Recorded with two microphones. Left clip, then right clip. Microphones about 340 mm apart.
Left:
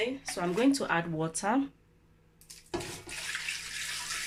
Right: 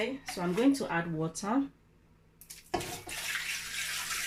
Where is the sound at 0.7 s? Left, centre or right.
Left.